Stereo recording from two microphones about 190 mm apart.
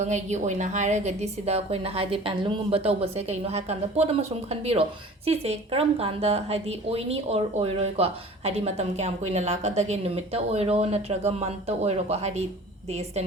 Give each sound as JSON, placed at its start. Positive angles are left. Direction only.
{"t": 0.0, "sound": "a woman's voice", "side_deg": -35}